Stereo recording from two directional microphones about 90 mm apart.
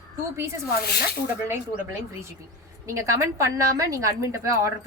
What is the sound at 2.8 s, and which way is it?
A woman's voice, 35° right (ahead or behind).